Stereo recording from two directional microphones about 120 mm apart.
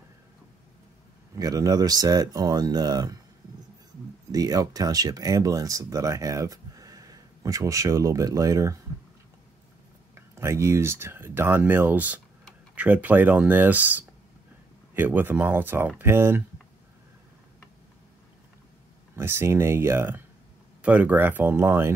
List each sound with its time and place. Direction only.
1.3 s speech: 30° right (ahead or behind)
4.3 s speech: 30° right (ahead or behind)
10.1 s speech: 20° right (ahead or behind)
19.1 s speech: 20° right (ahead or behind)